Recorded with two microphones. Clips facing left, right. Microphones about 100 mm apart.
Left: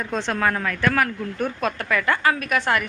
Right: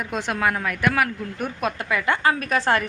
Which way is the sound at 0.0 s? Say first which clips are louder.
Left 1 dB; 10° right (ahead or behind).